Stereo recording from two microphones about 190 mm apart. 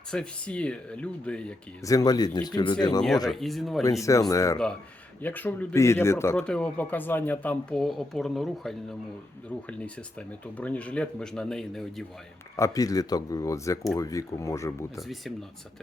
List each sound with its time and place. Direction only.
0.1 s speech: 5° left (ahead or behind)
1.8 s speech: 20° left (ahead or behind)
3.2 s speech: centre (ahead or behind)
4.0 s speech: 15° left (ahead or behind); by 12.0 s centre (ahead or behind)
12.5 s speech: 15° left (ahead or behind)
15.0 s speech: centre (ahead or behind)